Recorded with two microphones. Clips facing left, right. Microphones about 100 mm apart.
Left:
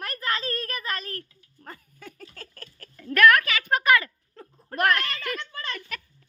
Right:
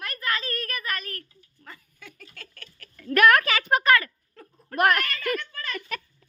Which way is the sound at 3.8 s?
15° left (ahead or behind).